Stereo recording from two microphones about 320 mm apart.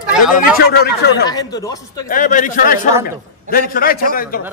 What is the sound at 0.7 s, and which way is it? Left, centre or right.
Speech, left.